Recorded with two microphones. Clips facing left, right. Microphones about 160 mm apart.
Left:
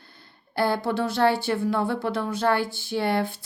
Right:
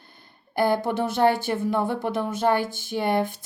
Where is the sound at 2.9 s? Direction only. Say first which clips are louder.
Right 1 dB; 20° right (ahead or behind).